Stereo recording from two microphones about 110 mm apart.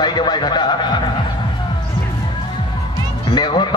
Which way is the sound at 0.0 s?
40° left (ahead or behind).